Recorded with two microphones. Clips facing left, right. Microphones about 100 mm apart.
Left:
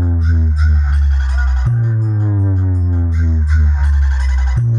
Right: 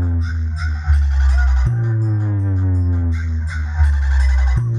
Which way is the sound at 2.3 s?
15° left (ahead or behind).